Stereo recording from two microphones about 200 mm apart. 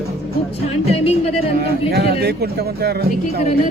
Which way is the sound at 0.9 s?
30° left (ahead or behind).